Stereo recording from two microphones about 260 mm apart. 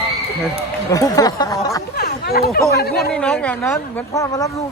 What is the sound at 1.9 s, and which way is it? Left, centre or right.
Speech, left.